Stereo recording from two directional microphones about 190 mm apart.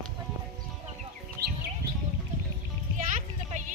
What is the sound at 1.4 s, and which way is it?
Bird, 55° right (ahead or behind).